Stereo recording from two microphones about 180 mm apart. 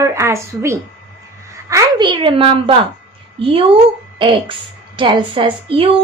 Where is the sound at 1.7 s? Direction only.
25° right (ahead or behind).